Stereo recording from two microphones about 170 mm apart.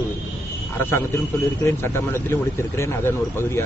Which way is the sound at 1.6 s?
15° left (ahead or behind).